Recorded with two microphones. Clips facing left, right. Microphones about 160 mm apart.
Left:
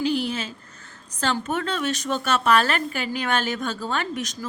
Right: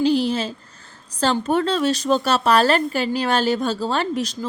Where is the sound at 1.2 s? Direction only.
35° right (ahead or behind).